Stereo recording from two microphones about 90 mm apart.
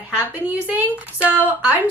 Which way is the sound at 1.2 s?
20° right (ahead or behind).